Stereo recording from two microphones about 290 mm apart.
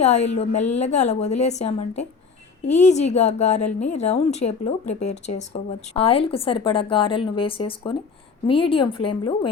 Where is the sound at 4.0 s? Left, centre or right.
Left.